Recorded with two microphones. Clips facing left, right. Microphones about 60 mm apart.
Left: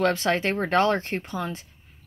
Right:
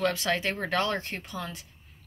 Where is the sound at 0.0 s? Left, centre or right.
Left.